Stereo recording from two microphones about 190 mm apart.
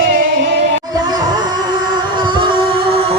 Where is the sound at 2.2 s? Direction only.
25° right (ahead or behind).